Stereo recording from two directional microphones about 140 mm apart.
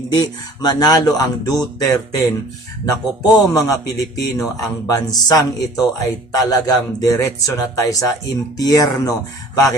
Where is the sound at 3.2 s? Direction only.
25° left (ahead or behind).